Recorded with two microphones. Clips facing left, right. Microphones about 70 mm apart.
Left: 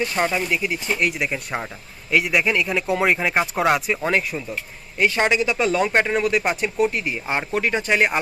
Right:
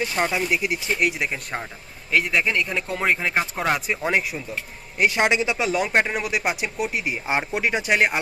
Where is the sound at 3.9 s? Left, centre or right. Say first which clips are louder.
Left 2 dB; centre.